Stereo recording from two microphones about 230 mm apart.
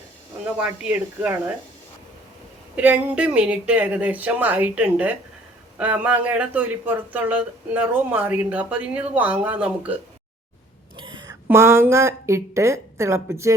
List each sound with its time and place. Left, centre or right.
0.4 s speech: centre
2.7 s a man's voice: centre
10.9 s whispering: centre
11.4 s a man's voice: centre